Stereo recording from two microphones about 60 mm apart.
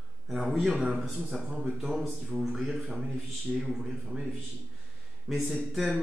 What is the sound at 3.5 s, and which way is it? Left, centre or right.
Speech, centre.